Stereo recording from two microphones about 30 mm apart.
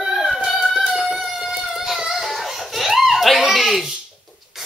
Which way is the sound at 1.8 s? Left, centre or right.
Centre.